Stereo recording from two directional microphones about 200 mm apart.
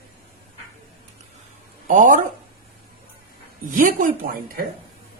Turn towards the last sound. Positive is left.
turn(degrees=-45)  # may be behind; listen again after turning